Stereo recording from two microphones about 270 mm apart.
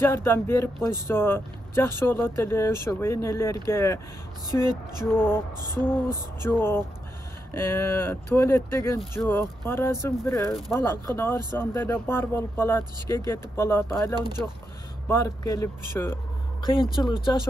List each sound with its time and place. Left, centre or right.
0.0 s speech: centre
15.0 s speech: centre